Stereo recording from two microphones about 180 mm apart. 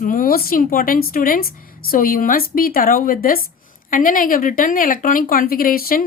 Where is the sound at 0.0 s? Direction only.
50° left (ahead or behind).